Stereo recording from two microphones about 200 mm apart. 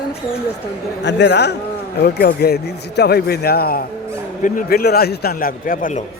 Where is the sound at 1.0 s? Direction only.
60° left (ahead or behind).